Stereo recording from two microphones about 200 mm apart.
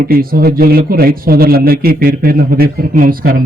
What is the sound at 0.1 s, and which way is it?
Speech, 50° right (ahead or behind).